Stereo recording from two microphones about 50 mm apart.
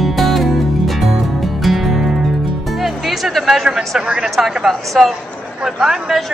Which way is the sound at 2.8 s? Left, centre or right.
Centre.